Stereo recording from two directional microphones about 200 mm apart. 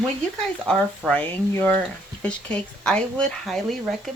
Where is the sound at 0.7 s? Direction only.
5° left (ahead or behind).